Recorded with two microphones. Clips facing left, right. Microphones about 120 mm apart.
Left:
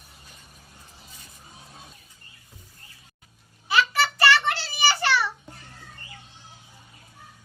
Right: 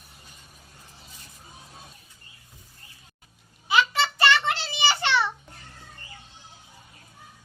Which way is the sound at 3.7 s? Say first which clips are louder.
Even; 20° right (ahead or behind).